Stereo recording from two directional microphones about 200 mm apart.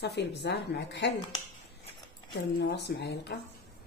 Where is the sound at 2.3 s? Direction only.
55° left (ahead or behind).